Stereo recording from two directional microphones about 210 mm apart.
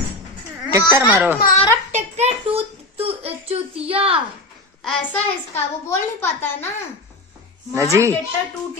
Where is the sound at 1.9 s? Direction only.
30° right (ahead or behind).